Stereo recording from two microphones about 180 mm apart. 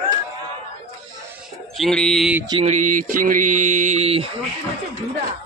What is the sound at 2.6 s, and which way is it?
Mantra, 45° right (ahead or behind).